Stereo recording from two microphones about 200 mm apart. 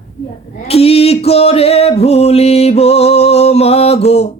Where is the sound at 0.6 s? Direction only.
30° left (ahead or behind).